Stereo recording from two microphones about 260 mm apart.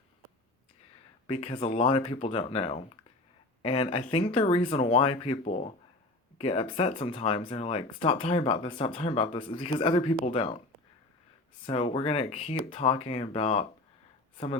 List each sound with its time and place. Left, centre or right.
1.3 s speech: left
11.6 s speech: left